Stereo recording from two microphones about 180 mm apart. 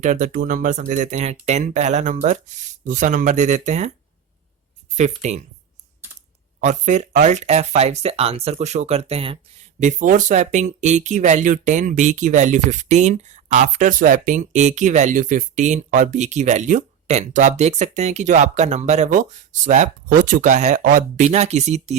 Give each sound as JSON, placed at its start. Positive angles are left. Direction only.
{"t": 0.0, "sound": "speech", "side_deg": -45}
{"t": 4.9, "sound": "speech", "side_deg": -40}
{"t": 6.6, "sound": "speech", "side_deg": -40}